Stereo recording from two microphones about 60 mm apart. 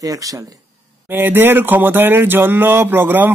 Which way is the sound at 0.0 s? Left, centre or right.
Right.